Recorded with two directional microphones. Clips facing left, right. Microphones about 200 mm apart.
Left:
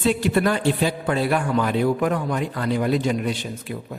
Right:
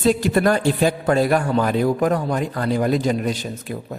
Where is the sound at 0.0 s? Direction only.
40° right (ahead or behind).